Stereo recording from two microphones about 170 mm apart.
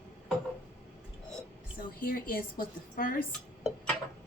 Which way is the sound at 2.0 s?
55° left (ahead or behind).